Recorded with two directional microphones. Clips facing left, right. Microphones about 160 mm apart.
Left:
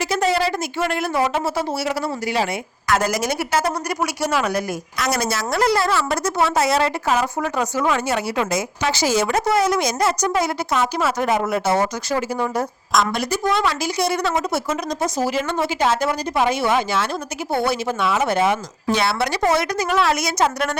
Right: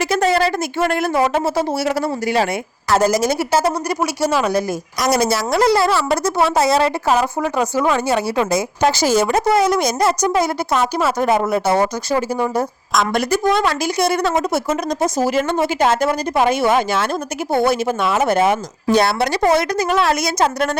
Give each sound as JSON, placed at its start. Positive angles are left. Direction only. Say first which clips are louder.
{"t": 0.0, "sound": "a woman's voice", "louder": "right 3 dB", "side_deg": -50}
{"t": 2.9, "sound": "a woman's voice", "louder": "right 5 dB", "side_deg": -30}
{"t": 13.1, "sound": "a woman's voice", "louder": "right 4 dB", "side_deg": -50}